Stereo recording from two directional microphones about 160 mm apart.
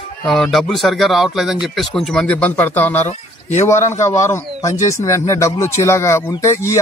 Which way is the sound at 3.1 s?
45° left (ahead or behind).